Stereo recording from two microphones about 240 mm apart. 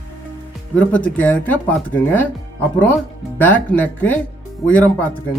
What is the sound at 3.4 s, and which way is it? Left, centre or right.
Speech, centre.